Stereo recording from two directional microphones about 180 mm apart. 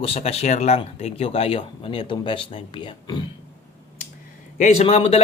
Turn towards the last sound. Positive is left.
turn(degrees=35)  # may be behind; listen again after turning